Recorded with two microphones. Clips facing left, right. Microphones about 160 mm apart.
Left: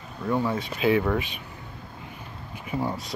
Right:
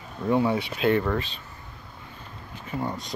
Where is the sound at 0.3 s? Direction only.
15° right (ahead or behind).